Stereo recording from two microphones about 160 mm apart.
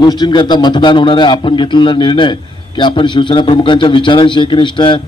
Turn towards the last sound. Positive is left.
turn(degrees=30)  # may be behind; listen again after turning